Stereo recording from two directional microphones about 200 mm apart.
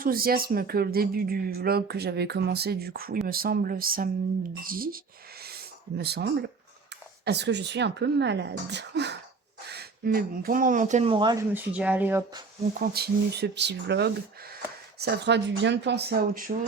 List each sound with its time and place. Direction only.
0.0 s speech: 45° right (ahead or behind)
6.0 s speech: 55° right (ahead or behind); by 11.4 s 20° right (ahead or behind)
11.5 s speech: 10° right (ahead or behind)
12.8 s speech: 50° right (ahead or behind)